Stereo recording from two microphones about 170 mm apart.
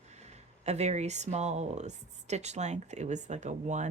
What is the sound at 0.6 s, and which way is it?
Speech, 40° right (ahead or behind).